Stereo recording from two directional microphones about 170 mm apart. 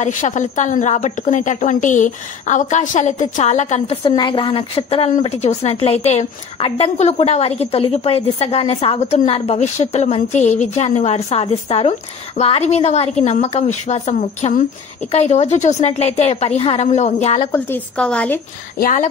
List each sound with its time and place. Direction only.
0.0 s a woman's voice: 45° left (ahead or behind)
17.5 s a woman's voice: 10° left (ahead or behind)
18.8 s a woman's voice: 50° left (ahead or behind)